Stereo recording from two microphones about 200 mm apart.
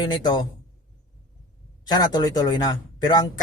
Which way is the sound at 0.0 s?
20° left (ahead or behind).